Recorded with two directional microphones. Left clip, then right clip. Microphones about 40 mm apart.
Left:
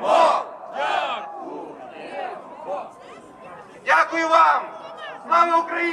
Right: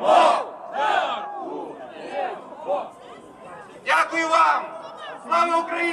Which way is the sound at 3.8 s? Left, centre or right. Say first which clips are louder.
Left 2 dB; left.